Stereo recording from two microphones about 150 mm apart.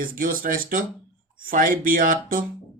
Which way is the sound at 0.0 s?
65° right (ahead or behind).